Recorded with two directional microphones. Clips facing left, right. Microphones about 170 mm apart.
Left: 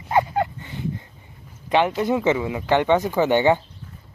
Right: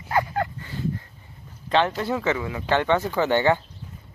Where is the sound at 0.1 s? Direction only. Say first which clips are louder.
Left 4 dB; 20° left (ahead or behind).